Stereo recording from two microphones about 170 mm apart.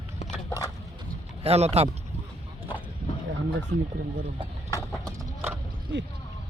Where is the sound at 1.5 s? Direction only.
40° right (ahead or behind).